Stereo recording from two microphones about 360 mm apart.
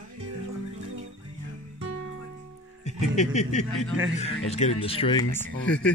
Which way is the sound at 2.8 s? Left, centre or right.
Centre.